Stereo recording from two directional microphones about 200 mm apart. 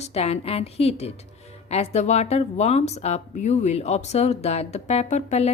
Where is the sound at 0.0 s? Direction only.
30° left (ahead or behind).